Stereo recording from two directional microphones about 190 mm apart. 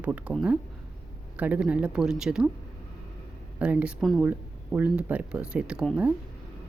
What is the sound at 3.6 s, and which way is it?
Speech, 5° right (ahead or behind).